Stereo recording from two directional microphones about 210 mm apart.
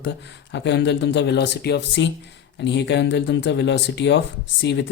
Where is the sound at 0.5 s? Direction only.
55° left (ahead or behind).